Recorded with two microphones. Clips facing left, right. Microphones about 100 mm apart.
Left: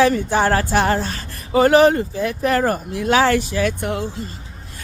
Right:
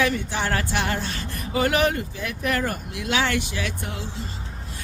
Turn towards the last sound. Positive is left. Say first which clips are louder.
# left 10 dB
turn(degrees=60)  # may be behind; listen again after turning